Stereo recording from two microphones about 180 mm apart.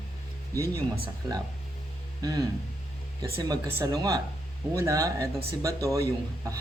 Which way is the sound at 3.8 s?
20° right (ahead or behind).